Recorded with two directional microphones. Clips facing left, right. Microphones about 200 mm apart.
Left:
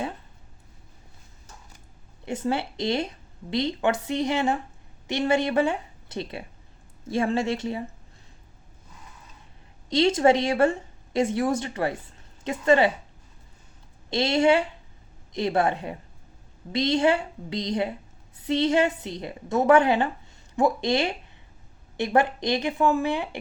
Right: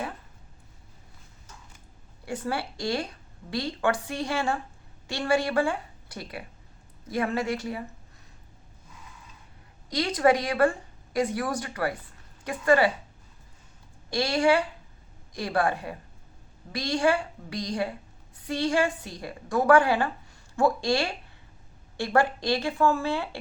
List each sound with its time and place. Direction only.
2.2 s a woman's voice: 25° left (ahead or behind)
9.9 s a woman's voice: 25° left (ahead or behind)
14.1 s a woman's voice: 25° left (ahead or behind)